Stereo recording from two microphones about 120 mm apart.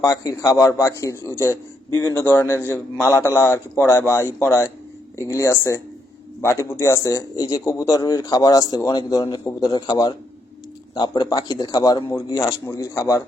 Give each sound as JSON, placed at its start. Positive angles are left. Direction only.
{"t": 0.0, "sound": "a man's voice", "side_deg": 30}